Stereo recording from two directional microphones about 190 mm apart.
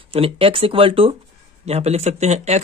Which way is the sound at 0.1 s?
30° right (ahead or behind).